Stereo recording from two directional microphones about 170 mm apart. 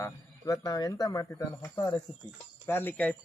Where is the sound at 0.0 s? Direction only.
20° left (ahead or behind).